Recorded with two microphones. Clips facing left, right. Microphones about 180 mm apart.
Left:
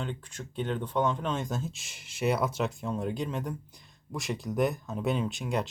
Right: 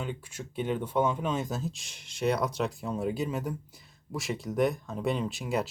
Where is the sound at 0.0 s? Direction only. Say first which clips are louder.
Even; 10° right (ahead or behind).